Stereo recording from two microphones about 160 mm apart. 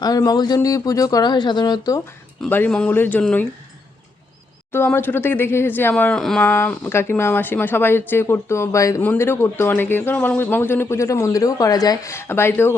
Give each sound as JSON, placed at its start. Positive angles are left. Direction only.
{"t": 0.0, "sound": "speech", "side_deg": 25}
{"t": 2.4, "sound": "speech", "side_deg": 10}
{"t": 4.7, "sound": "speech", "side_deg": 15}